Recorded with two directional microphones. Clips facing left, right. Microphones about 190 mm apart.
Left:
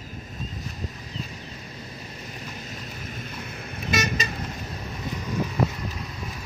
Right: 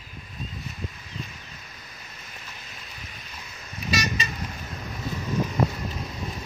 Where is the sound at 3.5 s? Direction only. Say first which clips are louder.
Left 1 dB; 55° left (ahead or behind).